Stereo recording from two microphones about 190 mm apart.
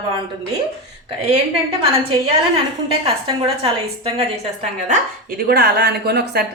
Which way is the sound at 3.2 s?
30° right (ahead or behind).